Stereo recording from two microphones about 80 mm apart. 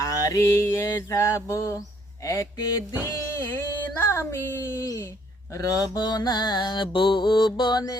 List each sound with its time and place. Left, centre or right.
0.0 s mantra: left
2.2 s speech: left
3.3 s mantra: left
5.5 s mantra: left